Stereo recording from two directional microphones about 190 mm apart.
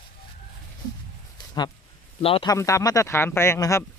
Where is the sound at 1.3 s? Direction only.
20° left (ahead or behind).